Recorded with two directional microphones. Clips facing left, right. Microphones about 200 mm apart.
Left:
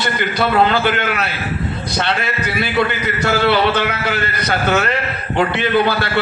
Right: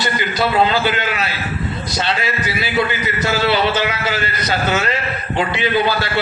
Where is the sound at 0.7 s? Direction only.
55° left (ahead or behind).